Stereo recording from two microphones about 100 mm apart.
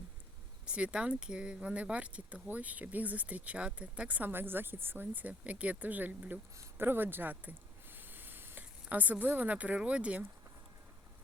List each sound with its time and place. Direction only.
0.6 s speech: 10° right (ahead or behind)